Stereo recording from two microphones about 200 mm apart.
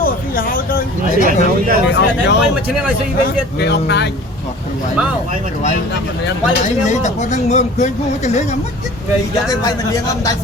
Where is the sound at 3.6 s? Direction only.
55° left (ahead or behind).